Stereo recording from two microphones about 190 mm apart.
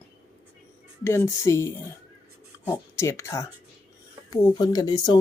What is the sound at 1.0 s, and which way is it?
Speech, 15° left (ahead or behind).